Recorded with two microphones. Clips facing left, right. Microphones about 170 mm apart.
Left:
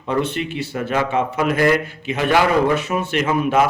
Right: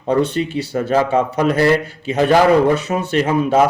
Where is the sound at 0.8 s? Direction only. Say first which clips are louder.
Right 4 dB; 40° right (ahead or behind).